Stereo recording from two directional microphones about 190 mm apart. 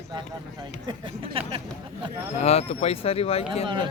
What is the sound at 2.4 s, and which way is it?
Speech, 35° left (ahead or behind).